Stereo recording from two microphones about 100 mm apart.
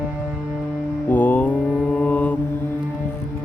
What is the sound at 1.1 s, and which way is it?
Mantra, 15° left (ahead or behind).